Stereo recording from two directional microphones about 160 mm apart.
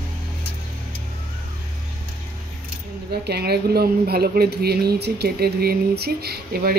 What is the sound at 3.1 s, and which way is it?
Speech, 85° right.